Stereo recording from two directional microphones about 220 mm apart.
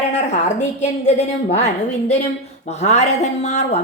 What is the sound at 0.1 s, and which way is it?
Speech, 30° left (ahead or behind).